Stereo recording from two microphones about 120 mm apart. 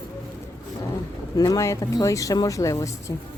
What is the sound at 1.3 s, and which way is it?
Speech, 30° left (ahead or behind).